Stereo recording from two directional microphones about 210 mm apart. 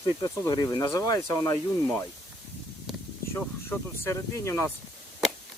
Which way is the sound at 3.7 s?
10° left (ahead or behind).